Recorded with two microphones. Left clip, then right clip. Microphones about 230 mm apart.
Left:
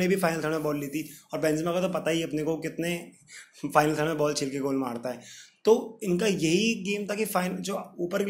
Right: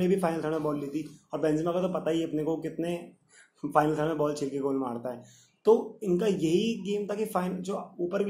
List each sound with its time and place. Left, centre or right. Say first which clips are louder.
0.0 s speech: left 1 dB; left